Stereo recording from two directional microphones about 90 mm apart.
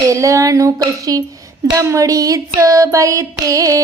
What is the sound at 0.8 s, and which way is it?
Speech, 45° right (ahead or behind).